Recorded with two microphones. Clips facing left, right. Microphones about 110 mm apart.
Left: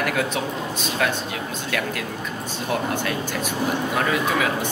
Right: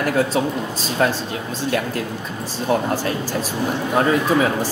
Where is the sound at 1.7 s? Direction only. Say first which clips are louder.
Right 5 dB; 35° right (ahead or behind).